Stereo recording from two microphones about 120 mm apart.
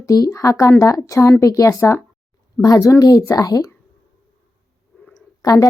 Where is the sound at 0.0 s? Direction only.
30° left (ahead or behind).